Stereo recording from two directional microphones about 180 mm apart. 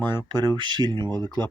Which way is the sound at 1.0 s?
15° left (ahead or behind).